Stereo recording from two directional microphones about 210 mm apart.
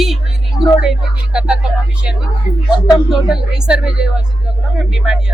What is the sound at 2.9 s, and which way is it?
A woman's voice, centre (ahead or behind).